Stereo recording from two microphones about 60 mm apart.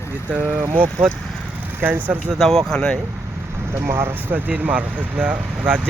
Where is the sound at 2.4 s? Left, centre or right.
Centre.